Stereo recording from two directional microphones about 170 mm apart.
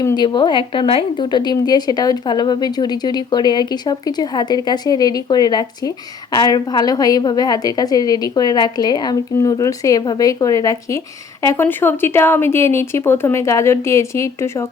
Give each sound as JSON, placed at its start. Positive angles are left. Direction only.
{"t": 0.0, "sound": "speech", "side_deg": 25}